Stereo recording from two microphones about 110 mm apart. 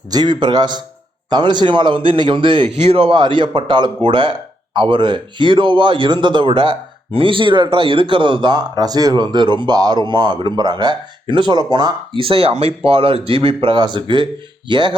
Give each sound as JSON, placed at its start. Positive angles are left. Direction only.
{"t": 0.1, "sound": "a man's voice", "side_deg": -40}
{"t": 2.6, "sound": "speech", "side_deg": -60}